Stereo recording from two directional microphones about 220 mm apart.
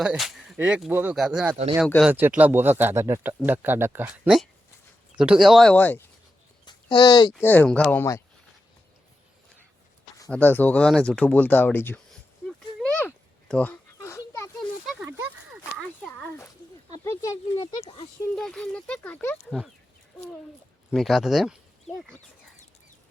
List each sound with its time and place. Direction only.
0.0 s speech: centre (ahead or behind)
6.7 s speech: 20° left (ahead or behind)
7.4 s speech: 5° left (ahead or behind)
10.3 s speech: 10° left (ahead or behind)
12.5 s a sound: 5° left (ahead or behind)
17.0 s speech: 10° left (ahead or behind)
17.8 s speech: 25° left (ahead or behind)
18.3 s speech: 5° left (ahead or behind)
20.9 s speech: centre (ahead or behind)